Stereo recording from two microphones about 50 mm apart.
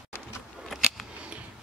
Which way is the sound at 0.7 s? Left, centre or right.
Centre.